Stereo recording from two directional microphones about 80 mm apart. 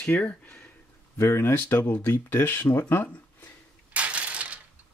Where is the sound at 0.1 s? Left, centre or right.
Left.